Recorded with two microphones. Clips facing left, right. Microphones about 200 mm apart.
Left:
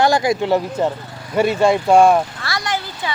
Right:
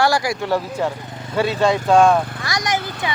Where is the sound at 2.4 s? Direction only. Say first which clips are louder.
Right 1 dB; 15° right (ahead or behind).